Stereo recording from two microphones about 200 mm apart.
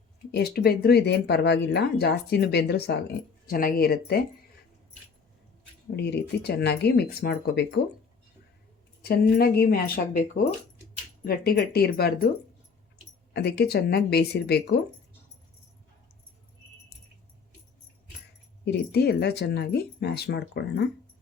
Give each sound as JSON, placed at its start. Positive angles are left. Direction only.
{"t": 0.3, "sound": "speech", "side_deg": 50}
{"t": 6.0, "sound": "speech", "side_deg": 55}
{"t": 9.0, "sound": "speech", "side_deg": 50}
{"t": 13.3, "sound": "speech", "side_deg": 55}
{"t": 18.6, "sound": "speech", "side_deg": 55}